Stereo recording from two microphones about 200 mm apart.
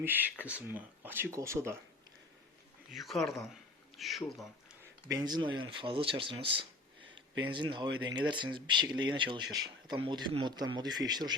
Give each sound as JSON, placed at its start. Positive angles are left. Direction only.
{"t": 0.0, "sound": "speech", "side_deg": -10}
{"t": 2.9, "sound": "speech", "side_deg": 0}
{"t": 5.0, "sound": "speech", "side_deg": -20}